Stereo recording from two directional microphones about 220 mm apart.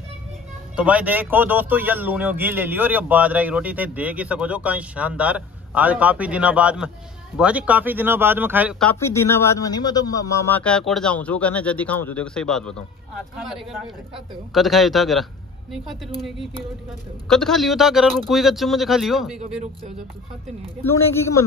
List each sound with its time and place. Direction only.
0.7 s speech: 5° right (ahead or behind)
8.8 s speech: 10° left (ahead or behind)
14.1 s a man's voice: centre (ahead or behind)
17.3 s a man's voice: centre (ahead or behind)
19.3 s speech: 30° right (ahead or behind)
20.8 s speech: 10° left (ahead or behind)